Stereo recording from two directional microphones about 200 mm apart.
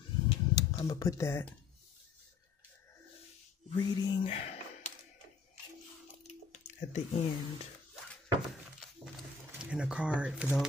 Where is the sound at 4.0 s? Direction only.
25° left (ahead or behind).